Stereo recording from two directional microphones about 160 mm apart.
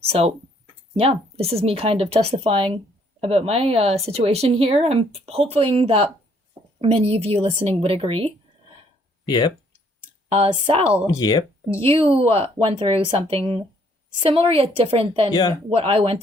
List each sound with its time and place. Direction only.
0.1 s speech: 35° right (ahead or behind)
9.2 s speech: 25° left (ahead or behind)
10.3 s speech: 35° right (ahead or behind)
11.0 s speech: 25° left (ahead or behind)
11.8 s speech: 35° right (ahead or behind)
15.3 s speech: 25° left (ahead or behind)
15.7 s speech: 40° right (ahead or behind)